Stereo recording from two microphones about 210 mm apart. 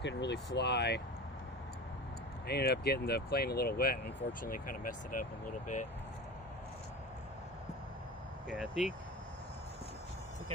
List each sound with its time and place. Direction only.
0.0 s speech: 55° left (ahead or behind)
2.5 s speech: 50° left (ahead or behind)
8.4 s speech: 5° right (ahead or behind)